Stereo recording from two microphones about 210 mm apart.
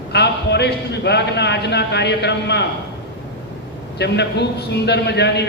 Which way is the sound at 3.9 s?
55° left (ahead or behind).